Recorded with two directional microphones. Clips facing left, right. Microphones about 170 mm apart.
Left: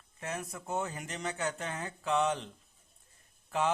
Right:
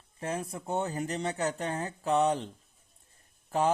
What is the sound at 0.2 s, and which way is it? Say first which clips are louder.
Speech: right 5 dB; 30° right (ahead or behind).